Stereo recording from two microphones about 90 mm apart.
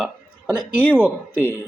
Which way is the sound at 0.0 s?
15° right (ahead or behind).